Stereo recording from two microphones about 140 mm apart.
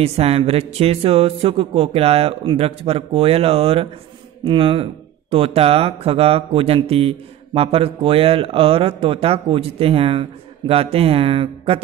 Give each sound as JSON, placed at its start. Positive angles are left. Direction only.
{"t": 0.0, "sound": "speech", "side_deg": -45}